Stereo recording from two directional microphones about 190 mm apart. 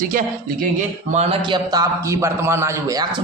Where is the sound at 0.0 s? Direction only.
45° right (ahead or behind).